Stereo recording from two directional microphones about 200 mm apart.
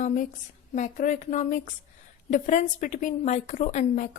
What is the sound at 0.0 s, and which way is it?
A woman's voice, 40° left (ahead or behind).